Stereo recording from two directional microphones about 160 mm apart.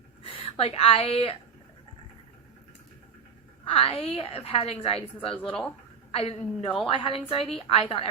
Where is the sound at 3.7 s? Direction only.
35° left (ahead or behind).